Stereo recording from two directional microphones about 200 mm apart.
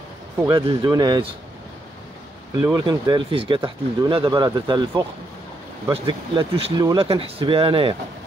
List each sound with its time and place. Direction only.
0.4 s speech: 20° right (ahead or behind)
2.8 s speech: 25° right (ahead or behind)
6.0 s speech: 25° right (ahead or behind)